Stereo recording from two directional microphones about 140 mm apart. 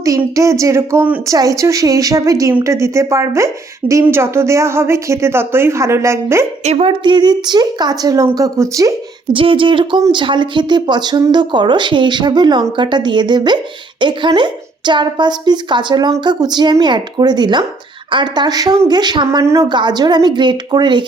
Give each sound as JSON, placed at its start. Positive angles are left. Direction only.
{"t": 0.3, "sound": "a woman's voice", "side_deg": -20}
{"t": 6.7, "sound": "a woman's voice", "side_deg": -45}
{"t": 9.3, "sound": "speech", "side_deg": -40}